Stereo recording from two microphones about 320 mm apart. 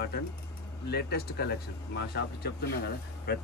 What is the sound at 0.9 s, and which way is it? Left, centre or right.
Speech, left.